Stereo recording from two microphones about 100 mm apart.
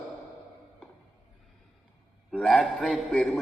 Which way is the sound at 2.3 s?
Centre (ahead or behind).